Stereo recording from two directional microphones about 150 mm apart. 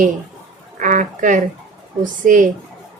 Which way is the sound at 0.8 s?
60° right (ahead or behind).